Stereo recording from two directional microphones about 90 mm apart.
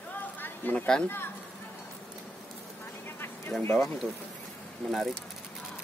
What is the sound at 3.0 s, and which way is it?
Vehicle, 25° left (ahead or behind).